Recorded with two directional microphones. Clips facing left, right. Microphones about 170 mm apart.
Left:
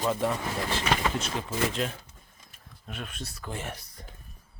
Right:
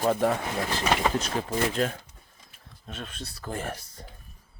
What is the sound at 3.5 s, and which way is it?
Speech, 40° right (ahead or behind).